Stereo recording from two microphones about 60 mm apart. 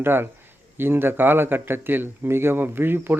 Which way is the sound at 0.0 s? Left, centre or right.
Right.